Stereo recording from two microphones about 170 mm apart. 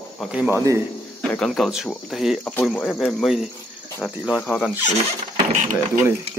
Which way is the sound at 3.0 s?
Centre (ahead or behind).